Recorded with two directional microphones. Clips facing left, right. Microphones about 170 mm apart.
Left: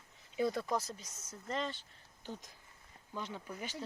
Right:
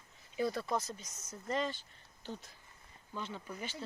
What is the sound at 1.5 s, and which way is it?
Speech, 5° right (ahead or behind).